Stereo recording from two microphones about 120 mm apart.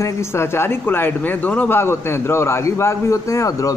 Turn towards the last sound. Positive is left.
turn(degrees=30)  # may be behind; listen again after turning